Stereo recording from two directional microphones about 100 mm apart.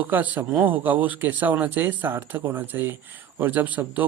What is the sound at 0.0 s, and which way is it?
Speech, 15° right (ahead or behind).